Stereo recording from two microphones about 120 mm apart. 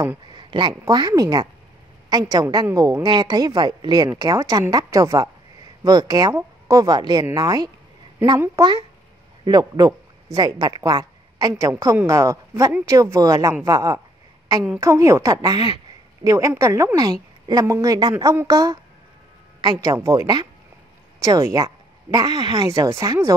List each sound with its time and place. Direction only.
0.3 s a woman's voice: 40° right (ahead or behind)
22.7 s a woman's voice: 25° right (ahead or behind)